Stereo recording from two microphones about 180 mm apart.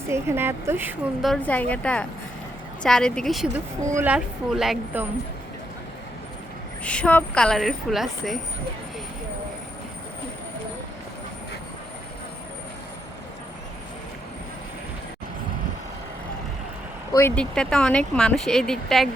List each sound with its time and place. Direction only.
0.1 s speech: 15° right (ahead or behind)
1.2 s speech: 5° left (ahead or behind)
6.8 s speech: 5° left (ahead or behind)
17.1 s speech: 15° left (ahead or behind)